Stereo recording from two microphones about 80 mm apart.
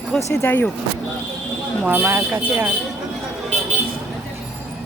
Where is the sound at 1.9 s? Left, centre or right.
Right.